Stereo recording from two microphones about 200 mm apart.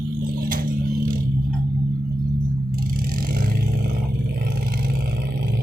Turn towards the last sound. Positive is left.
turn(degrees=-45)  # may be behind; listen again after turning